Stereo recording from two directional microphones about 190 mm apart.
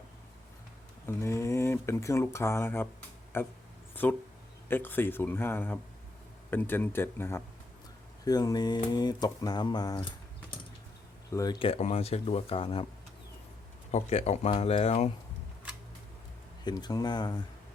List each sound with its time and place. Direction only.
1.0 s speech: 15° left (ahead or behind)
11.3 s speech: 15° left (ahead or behind)
11.6 s speech: 35° left (ahead or behind)
13.9 s speech: 35° left (ahead or behind)
16.6 s speech: 20° left (ahead or behind)